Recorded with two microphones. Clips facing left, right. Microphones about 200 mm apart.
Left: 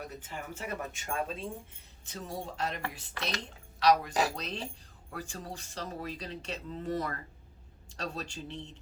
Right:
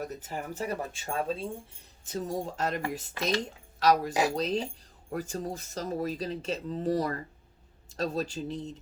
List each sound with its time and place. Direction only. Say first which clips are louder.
0.0 s speech: right 6 dB; 40° right (ahead or behind)
2.1 s speech: right 6 dB; 40° right (ahead or behind)